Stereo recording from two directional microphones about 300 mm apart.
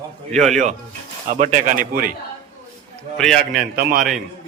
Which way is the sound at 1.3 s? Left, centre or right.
Right.